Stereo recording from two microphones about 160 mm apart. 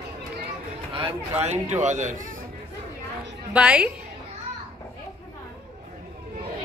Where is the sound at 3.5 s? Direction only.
10° right (ahead or behind).